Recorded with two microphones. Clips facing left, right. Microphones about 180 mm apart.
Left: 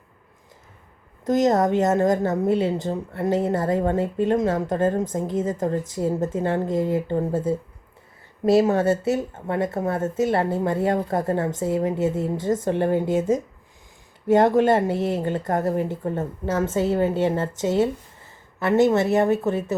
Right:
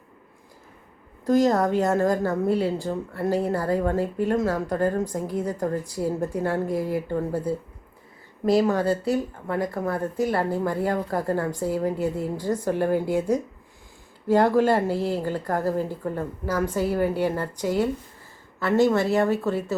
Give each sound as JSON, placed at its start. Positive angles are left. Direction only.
{"t": 1.2, "sound": "a woman's voice", "side_deg": 20}